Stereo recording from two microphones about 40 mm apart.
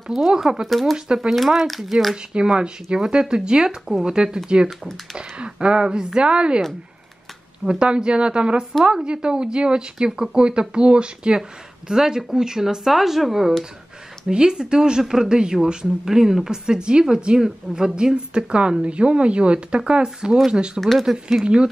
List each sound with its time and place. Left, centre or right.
0.1 s speech: centre
0.9 s a woman's voice: right
1.3 s speech: centre
2.3 s a woman's voice: right
7.6 s a woman's voice: right
11.9 s speech: centre
14.3 s a woman's voice: right
20.3 s speech: centre